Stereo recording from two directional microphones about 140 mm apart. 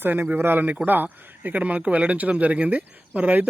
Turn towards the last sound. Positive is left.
turn(degrees=-10)  # may be behind; listen again after turning